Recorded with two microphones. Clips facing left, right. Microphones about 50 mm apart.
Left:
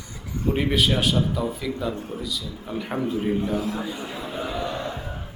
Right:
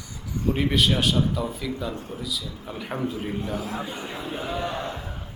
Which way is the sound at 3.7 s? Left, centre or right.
Right.